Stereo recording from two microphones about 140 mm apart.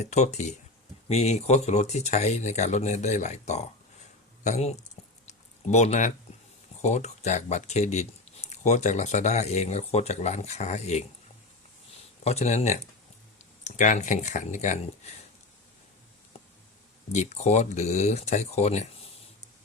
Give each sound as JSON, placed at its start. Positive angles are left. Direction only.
{"t": 0.0, "sound": "speech", "side_deg": 55}
{"t": 5.2, "sound": "a sound", "side_deg": 55}
{"t": 6.8, "sound": "speech", "side_deg": 55}
{"t": 12.2, "sound": "speech", "side_deg": 50}
{"t": 13.7, "sound": "speech", "side_deg": 65}
{"t": 17.1, "sound": "speech", "side_deg": 55}